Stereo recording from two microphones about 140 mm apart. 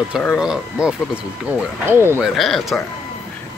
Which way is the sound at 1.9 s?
15° right (ahead or behind).